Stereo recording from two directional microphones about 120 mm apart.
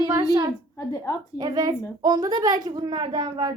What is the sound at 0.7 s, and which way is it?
Speech, 30° left (ahead or behind).